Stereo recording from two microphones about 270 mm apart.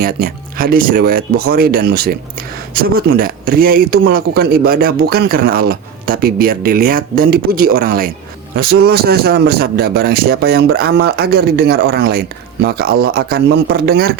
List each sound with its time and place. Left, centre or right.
0.0 s speech: right